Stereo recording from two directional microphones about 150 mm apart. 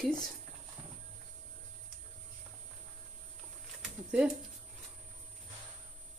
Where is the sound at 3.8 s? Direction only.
5° right (ahead or behind).